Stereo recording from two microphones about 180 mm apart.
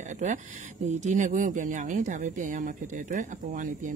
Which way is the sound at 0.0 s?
45° right (ahead or behind).